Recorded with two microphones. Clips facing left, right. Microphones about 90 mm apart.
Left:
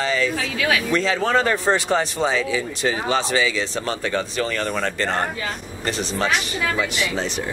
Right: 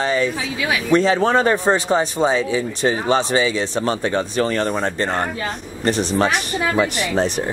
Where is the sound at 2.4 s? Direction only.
30° right (ahead or behind).